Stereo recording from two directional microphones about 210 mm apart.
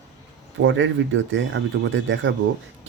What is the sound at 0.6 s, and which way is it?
Speech, 60° right (ahead or behind).